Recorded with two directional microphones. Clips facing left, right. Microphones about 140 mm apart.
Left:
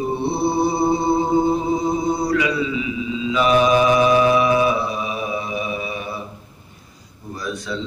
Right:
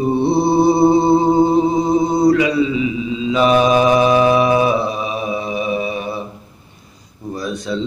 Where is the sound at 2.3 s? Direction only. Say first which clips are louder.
Right 6 dB; 30° right (ahead or behind).